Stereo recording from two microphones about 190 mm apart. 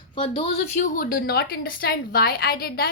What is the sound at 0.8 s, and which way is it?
A woman's voice, 45° left (ahead or behind).